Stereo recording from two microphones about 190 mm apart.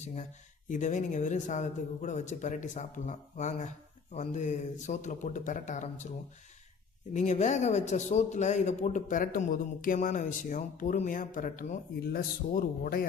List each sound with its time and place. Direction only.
0.0 s a man's voice: 40° left (ahead or behind)